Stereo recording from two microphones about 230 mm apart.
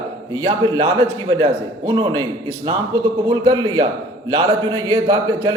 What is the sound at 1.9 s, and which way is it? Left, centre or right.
A man's voice, centre.